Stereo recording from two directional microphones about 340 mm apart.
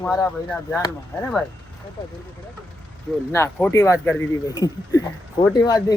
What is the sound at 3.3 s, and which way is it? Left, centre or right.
Speech, centre.